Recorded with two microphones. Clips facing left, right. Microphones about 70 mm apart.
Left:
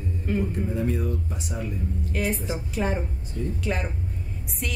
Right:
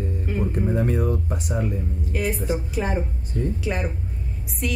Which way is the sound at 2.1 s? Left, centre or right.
Centre.